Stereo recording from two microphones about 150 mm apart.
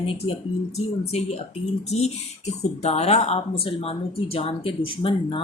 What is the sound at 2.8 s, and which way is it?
A woman's voice, 45° left (ahead or behind).